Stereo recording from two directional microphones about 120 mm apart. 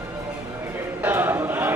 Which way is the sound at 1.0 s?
15° right (ahead or behind).